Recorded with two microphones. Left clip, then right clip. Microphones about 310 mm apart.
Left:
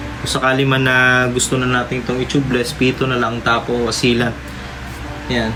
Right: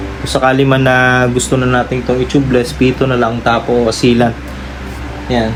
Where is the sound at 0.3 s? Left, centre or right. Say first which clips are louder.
Right 5 dB; centre.